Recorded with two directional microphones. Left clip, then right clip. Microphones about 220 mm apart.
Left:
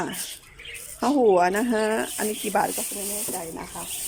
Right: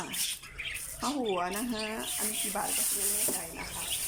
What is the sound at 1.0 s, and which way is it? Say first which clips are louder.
Speech: left 13 dB; 45° left (ahead or behind).